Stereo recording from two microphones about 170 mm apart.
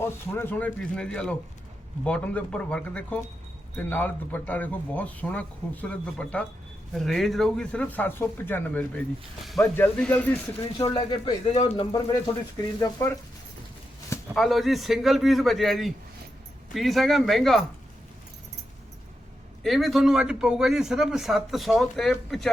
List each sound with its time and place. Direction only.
0.0 s speech: 15° left (ahead or behind)
10.8 s speech: 25° left (ahead or behind)
12.8 s speech: 15° left (ahead or behind)
14.3 s speech: centre (ahead or behind)
19.6 s speech: centre (ahead or behind)